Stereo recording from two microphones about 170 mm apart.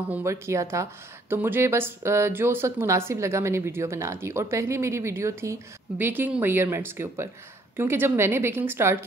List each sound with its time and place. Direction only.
0.1 s speech: 15° right (ahead or behind)